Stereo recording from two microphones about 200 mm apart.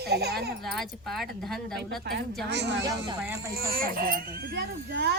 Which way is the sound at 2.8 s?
15° right (ahead or behind).